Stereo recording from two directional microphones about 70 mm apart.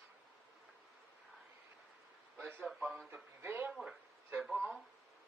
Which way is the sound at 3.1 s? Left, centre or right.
Right.